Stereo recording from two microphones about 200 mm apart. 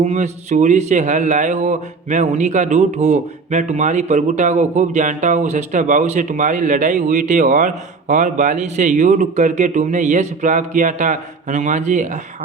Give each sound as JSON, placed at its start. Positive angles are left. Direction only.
{"t": 0.0, "sound": "a man's voice", "side_deg": -35}